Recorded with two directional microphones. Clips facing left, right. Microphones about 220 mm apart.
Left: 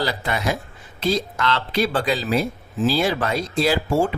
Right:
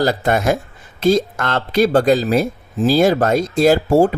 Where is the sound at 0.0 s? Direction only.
45° right (ahead or behind).